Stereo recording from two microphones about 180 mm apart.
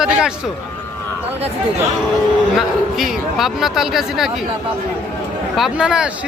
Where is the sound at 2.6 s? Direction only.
Centre (ahead or behind).